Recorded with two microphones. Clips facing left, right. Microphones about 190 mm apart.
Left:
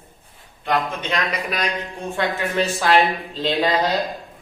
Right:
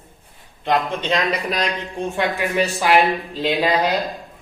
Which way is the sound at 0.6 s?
25° right (ahead or behind).